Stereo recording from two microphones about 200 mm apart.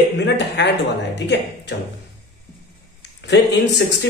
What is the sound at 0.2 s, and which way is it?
A man's voice, 60° left (ahead or behind).